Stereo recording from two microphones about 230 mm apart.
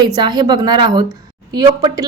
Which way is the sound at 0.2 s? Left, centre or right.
Centre.